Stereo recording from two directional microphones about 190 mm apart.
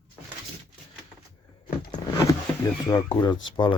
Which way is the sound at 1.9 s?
15° left (ahead or behind).